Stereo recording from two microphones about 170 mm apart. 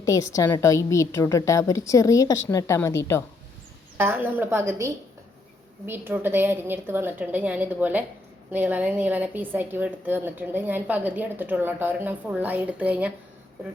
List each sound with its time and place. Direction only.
0.0 s a woman's voice: 20° left (ahead or behind)
3.9 s a woman's voice: 10° right (ahead or behind)